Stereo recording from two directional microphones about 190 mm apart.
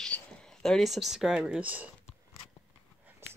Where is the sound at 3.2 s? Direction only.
15° right (ahead or behind).